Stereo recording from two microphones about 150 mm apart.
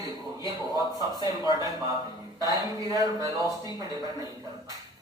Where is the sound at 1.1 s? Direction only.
30° left (ahead or behind).